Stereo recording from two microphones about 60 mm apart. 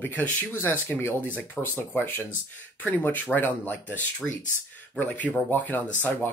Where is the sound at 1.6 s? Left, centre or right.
Left.